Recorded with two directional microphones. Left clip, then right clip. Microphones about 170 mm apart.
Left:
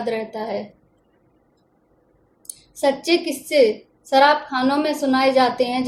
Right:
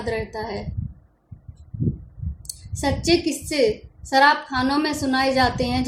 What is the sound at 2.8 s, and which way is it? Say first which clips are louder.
A woman's voice: left 2 dB; 25° right (ahead or behind).